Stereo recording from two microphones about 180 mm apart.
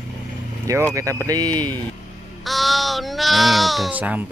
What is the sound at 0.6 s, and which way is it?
Speech, 15° right (ahead or behind).